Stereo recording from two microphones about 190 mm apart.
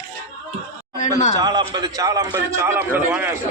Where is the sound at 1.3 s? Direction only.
20° right (ahead or behind).